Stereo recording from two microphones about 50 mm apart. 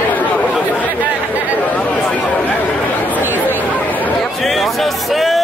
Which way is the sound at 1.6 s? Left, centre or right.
Left.